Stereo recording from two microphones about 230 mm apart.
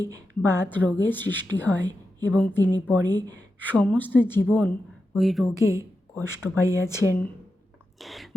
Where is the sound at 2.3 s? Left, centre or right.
Centre.